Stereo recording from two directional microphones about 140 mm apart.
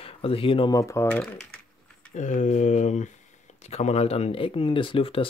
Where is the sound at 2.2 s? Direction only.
60° left (ahead or behind).